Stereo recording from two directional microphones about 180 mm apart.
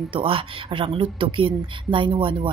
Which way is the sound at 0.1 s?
30° right (ahead or behind).